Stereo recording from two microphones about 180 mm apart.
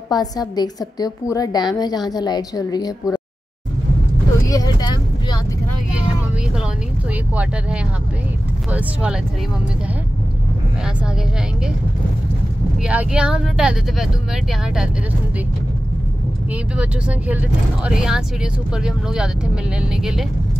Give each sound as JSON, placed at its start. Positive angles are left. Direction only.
{"t": 0.1, "sound": "a woman's voice", "side_deg": 20}
{"t": 4.5, "sound": "vehicle", "side_deg": 20}
{"t": 8.6, "sound": "speech", "side_deg": -5}
{"t": 12.8, "sound": "speech", "side_deg": -5}
{"t": 16.7, "sound": "speech", "side_deg": -10}